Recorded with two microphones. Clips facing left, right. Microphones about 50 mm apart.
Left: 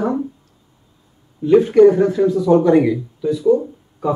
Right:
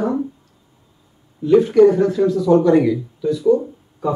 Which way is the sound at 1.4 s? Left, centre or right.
Left.